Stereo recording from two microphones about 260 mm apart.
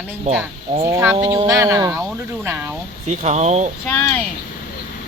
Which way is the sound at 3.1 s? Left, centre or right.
Right.